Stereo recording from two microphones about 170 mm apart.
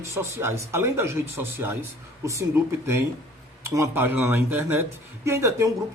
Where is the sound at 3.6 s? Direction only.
15° right (ahead or behind).